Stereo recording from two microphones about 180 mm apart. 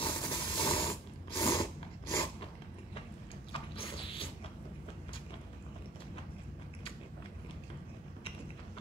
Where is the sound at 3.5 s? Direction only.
30° left (ahead or behind).